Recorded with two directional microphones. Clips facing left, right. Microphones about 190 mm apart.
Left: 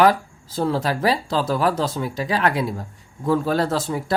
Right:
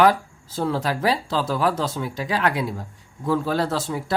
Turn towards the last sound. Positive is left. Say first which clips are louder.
# left 2 dB
turn(degrees=40)  # may be behind; listen again after turning